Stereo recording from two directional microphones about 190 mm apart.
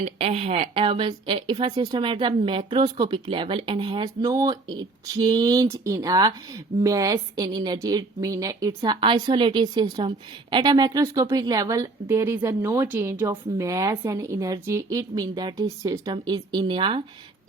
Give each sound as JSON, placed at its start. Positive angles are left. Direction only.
{"t": 0.0, "sound": "a woman's voice", "side_deg": -30}